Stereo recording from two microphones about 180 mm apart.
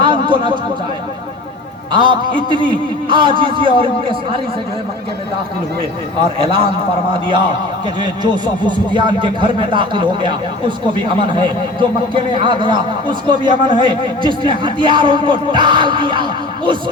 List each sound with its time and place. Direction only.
0.0 s a sound: 25° right (ahead or behind)
1.9 s speech: 25° right (ahead or behind)
7.1 s speech: 25° right (ahead or behind)